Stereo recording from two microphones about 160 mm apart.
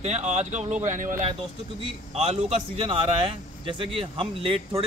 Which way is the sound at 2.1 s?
40° right (ahead or behind).